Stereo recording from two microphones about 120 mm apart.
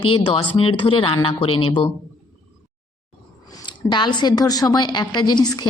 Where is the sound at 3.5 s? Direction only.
40° left (ahead or behind).